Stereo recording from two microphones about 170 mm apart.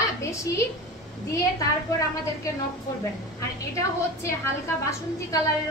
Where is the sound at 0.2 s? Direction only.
15° left (ahead or behind).